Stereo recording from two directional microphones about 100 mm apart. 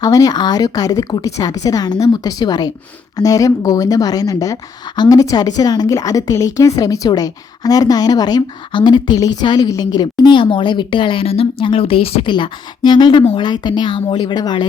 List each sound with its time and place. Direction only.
0.0 s a woman's voice: 35° left (ahead or behind); by 12.3 s 70° left (ahead or behind)
12.3 s speech: 50° left (ahead or behind)